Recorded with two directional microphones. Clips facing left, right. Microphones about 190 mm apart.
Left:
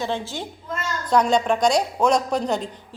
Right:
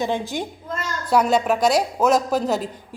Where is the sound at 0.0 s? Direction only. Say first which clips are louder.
Right 3 dB; 15° right (ahead or behind).